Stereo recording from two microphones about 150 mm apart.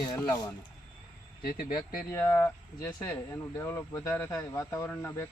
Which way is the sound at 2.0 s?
15° left (ahead or behind).